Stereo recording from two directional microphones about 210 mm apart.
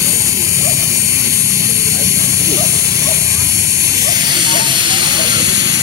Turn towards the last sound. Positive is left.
turn(degrees=-20)  # may be behind; listen again after turning